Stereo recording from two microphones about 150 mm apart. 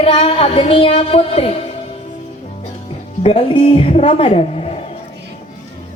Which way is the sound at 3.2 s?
35° left (ahead or behind).